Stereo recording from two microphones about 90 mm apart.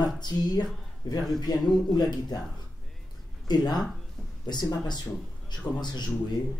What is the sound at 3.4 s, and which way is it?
Speech, 50° left (ahead or behind).